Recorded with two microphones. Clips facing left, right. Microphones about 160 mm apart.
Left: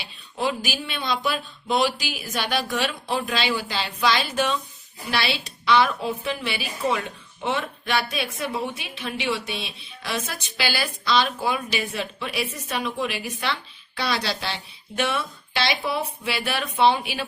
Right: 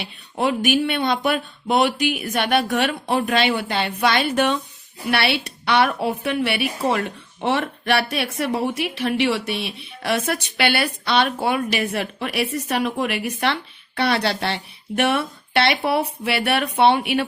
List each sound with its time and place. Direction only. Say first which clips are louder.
0.0 s a woman's voice: right 4 dB; 60° right (ahead or behind)